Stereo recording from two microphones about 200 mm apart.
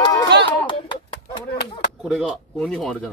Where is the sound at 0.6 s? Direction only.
25° left (ahead or behind).